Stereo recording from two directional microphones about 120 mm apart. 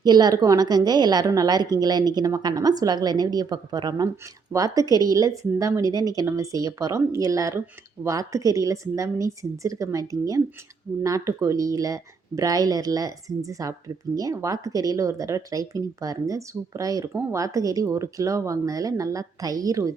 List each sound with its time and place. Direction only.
0.0 s a woman's voice: 35° right (ahead or behind)